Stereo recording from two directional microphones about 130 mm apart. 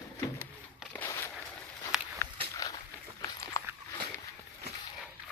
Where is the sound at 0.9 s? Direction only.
15° left (ahead or behind).